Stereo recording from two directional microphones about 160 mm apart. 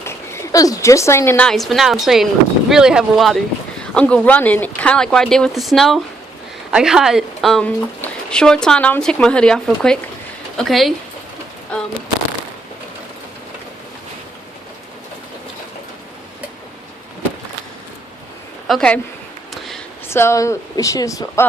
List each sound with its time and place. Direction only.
0.0 s speech: 15° left (ahead or behind)
1.5 s speech: centre (ahead or behind)
18.7 s speech: 5° left (ahead or behind)
20.1 s speech: 15° left (ahead or behind)